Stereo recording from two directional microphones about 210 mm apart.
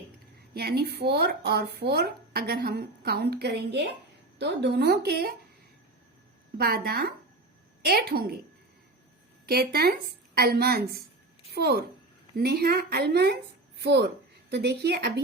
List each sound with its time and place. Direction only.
0.5 s speech: 50° right (ahead or behind)
6.6 s speech: 45° right (ahead or behind)
9.5 s speech: 50° right (ahead or behind)